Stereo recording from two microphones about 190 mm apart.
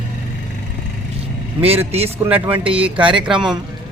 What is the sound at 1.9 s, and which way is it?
Speech, 30° right (ahead or behind).